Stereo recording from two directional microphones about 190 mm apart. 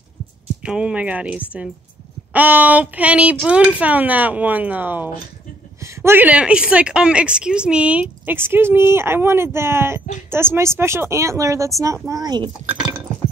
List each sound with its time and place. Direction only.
0.6 s a woman's voice: 5° right (ahead or behind); by 12.4 s 20° right (ahead or behind)